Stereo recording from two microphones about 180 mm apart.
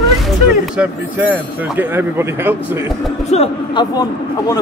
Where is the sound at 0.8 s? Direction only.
10° right (ahead or behind).